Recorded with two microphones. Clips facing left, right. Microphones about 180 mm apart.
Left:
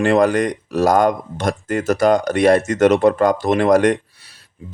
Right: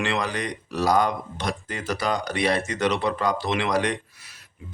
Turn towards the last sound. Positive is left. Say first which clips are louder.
# even
turn(degrees=30)  # may be behind; listen again after turning